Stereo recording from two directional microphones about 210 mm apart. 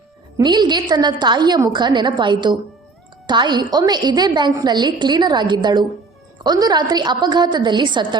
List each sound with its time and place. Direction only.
0.3 s a woman's voice: 20° right (ahead or behind)